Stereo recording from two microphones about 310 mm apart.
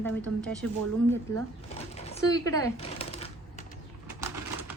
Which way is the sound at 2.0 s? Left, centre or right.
Centre.